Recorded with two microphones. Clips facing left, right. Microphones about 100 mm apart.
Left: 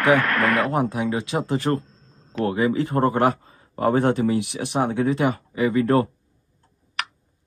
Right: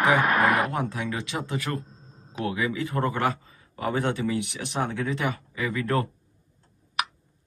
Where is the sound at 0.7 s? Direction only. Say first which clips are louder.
Left 6 dB; 25° left (ahead or behind).